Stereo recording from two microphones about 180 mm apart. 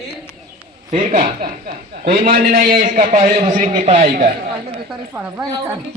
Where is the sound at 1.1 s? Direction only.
50° right (ahead or behind).